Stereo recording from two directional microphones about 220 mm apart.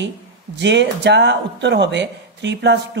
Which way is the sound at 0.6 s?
50° right (ahead or behind).